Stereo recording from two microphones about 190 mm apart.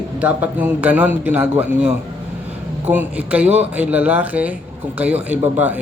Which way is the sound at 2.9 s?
10° right (ahead or behind).